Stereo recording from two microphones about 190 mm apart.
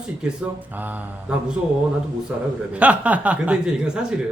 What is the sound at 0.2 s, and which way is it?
Speech, 5° right (ahead or behind).